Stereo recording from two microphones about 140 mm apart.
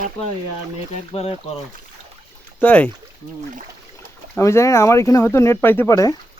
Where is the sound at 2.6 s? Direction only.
10° left (ahead or behind).